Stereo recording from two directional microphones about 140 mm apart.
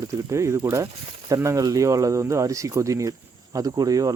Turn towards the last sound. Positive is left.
turn(degrees=-25)  # may be behind; listen again after turning